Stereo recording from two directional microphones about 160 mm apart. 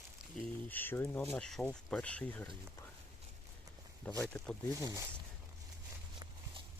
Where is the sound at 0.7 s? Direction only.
10° left (ahead or behind).